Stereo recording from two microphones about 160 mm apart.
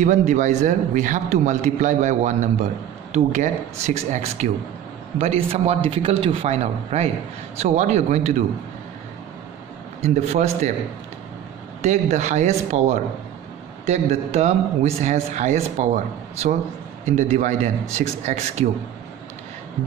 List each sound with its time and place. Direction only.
0.0 s a man's voice: 50° right (ahead or behind)
10.0 s a man's voice: 45° right (ahead or behind)
11.8 s a man's voice: 45° right (ahead or behind)